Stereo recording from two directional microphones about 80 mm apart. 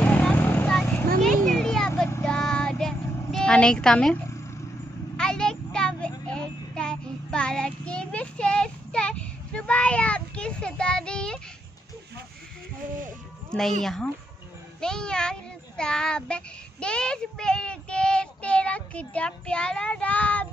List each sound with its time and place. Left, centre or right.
0.0 s vehicle: centre
1.2 s a sound: centre
2.2 s child singing: centre
13.5 s a child's voice: centre